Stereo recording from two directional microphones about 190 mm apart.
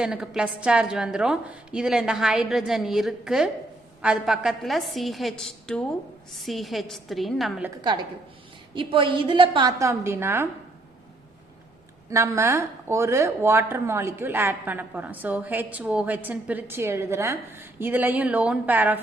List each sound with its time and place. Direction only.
0.0 s a woman's voice: 5° right (ahead or behind)
8.7 s a woman's voice: 25° right (ahead or behind)
12.1 s speech: 15° right (ahead or behind)